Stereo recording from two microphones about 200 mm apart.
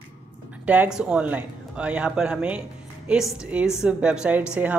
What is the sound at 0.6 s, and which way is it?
A woman's voice, 5° right (ahead or behind).